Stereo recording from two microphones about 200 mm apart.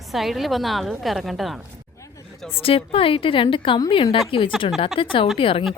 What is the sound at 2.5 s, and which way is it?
A woman's voice, 30° left (ahead or behind).